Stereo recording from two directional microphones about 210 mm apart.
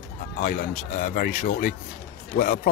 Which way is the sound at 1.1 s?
40° left (ahead or behind).